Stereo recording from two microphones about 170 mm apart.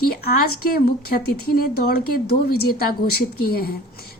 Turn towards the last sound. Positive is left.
turn(degrees=65)  # may be behind; listen again after turning